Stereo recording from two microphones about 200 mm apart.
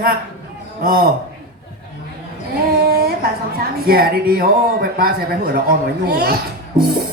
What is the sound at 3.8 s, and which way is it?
A man's voice, 50° right (ahead or behind).